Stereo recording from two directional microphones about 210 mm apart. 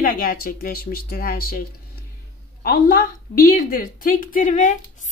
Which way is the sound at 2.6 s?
45° left (ahead or behind).